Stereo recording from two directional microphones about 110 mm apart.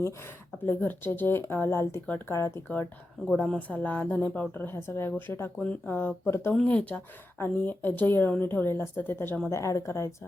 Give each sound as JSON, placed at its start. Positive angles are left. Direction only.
{"t": 0.6, "sound": "speech", "side_deg": 20}
{"t": 3.4, "sound": "a woman's voice", "side_deg": 10}